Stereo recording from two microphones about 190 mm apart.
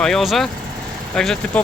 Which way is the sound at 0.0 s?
Centre (ahead or behind).